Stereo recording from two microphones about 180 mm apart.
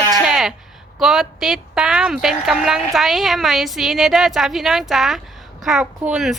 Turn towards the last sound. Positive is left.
turn(degrees=-5)  # may be behind; listen again after turning